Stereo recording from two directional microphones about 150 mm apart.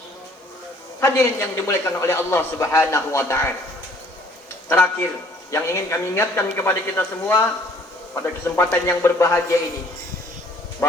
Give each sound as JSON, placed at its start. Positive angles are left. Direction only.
{"t": 0.9, "sound": "a man's voice", "side_deg": 20}
{"t": 4.7, "sound": "a man's voice", "side_deg": 15}